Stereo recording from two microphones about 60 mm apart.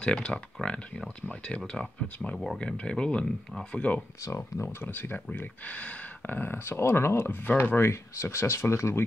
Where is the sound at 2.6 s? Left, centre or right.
Centre.